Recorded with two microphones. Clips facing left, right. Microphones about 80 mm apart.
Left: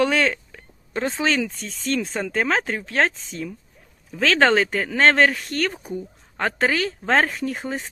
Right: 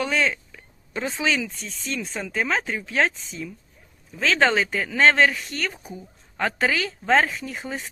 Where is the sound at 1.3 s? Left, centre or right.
Left.